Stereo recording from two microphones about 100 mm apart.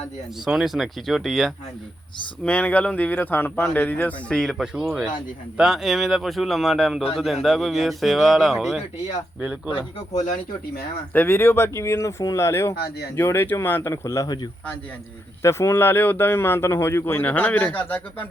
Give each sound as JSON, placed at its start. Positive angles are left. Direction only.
{"t": 0.4, "sound": "speech", "side_deg": -5}
{"t": 2.4, "sound": "speech", "side_deg": 15}
{"t": 4.4, "sound": "speech", "side_deg": 0}
{"t": 11.1, "sound": "speech", "side_deg": 20}
{"t": 15.4, "sound": "speech", "side_deg": 25}